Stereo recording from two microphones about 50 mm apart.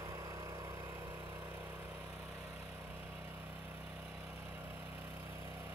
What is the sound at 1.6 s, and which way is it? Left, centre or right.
Vehicle, right.